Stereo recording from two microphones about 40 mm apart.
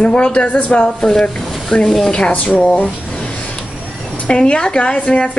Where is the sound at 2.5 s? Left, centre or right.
Left.